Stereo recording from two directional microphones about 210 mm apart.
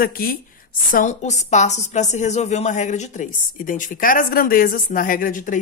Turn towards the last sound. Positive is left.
turn(degrees=40)  # may be behind; listen again after turning